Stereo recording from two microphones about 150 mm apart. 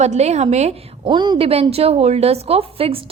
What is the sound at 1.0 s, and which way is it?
A woman's voice, 30° right (ahead or behind).